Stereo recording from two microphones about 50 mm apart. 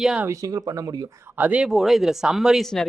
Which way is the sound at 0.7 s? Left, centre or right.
Right.